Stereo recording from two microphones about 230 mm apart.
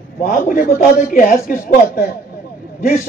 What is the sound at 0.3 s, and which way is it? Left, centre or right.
A woman's voice, left.